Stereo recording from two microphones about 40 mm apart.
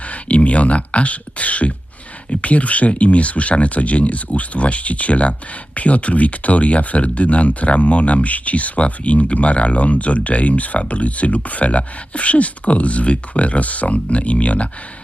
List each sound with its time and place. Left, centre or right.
0.1 s speech: left